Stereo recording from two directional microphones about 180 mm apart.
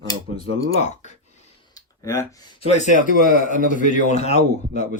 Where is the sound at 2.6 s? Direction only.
35° left (ahead or behind).